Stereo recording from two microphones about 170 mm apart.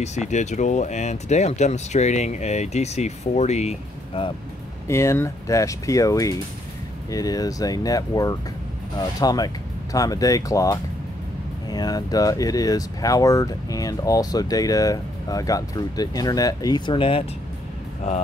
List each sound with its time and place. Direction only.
0.0 s speech: 40° left (ahead or behind)
4.8 s speech: 15° left (ahead or behind); by 17.2 s 30° left (ahead or behind)